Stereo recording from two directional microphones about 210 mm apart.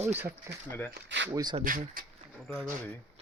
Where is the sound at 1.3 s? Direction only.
20° right (ahead or behind).